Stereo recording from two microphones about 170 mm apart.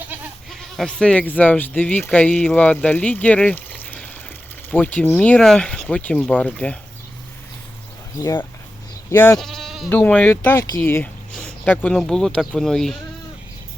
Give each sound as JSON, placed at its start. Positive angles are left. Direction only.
{"t": 0.5, "sound": "speech", "side_deg": 0}
{"t": 8.2, "sound": "speech", "side_deg": 15}
{"t": 9.4, "sound": "sheep", "side_deg": 0}
{"t": 9.9, "sound": "speech", "side_deg": 5}